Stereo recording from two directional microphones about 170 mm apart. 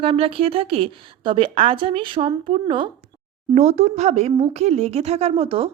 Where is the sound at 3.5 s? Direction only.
40° right (ahead or behind).